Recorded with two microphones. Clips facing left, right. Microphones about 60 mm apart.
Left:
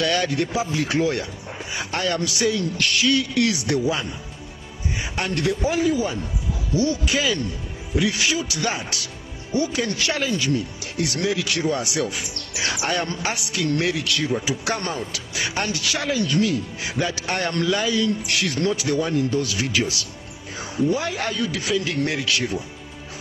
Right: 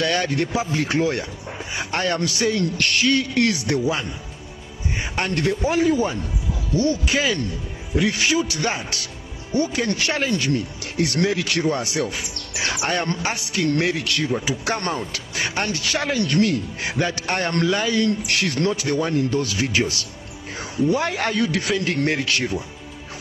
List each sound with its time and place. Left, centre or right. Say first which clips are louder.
0.0 s speech: even; right
5.0 s speech: right 1 dB; right
10.3 s speech: right 1 dB; right
16.2 s a man's voice: right 2 dB; right
20.9 s a man's voice: right 3 dB; right